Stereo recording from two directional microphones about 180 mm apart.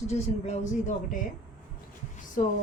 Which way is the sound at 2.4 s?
45° left (ahead or behind).